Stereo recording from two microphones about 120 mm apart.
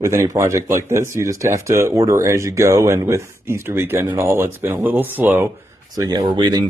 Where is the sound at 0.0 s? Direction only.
25° right (ahead or behind).